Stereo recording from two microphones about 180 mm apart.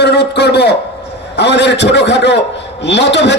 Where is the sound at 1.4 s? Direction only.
75° left (ahead or behind).